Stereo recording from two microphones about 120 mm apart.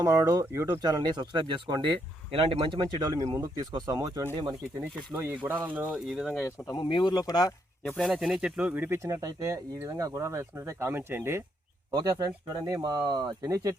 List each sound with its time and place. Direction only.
0.0 s speech: 30° right (ahead or behind)
5.1 s speech: 15° right (ahead or behind)
6.1 s speech: centre (ahead or behind)
6.7 s speech: 40° left (ahead or behind)
7.9 s speech: 5° left (ahead or behind); by 11.4 s 20° right (ahead or behind)
11.9 s speech: 35° right (ahead or behind)